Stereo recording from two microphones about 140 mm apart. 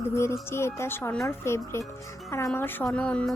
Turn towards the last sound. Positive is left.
turn(degrees=10)  # may be behind; listen again after turning